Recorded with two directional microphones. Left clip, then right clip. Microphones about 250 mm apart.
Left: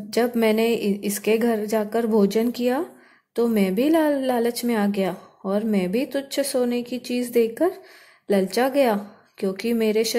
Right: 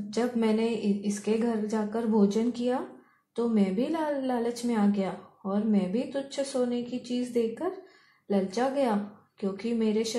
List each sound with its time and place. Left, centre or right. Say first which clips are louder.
0.1 s a woman's voice: left 8 dB; left